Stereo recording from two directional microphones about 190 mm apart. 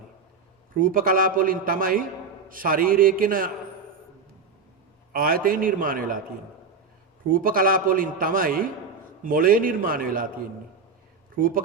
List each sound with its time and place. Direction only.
0.8 s a man's voice: 45° right (ahead or behind)
5.1 s a man's voice: 50° right (ahead or behind)
7.3 s a man's voice: 45° right (ahead or behind)
11.4 s a man's voice: 45° right (ahead or behind)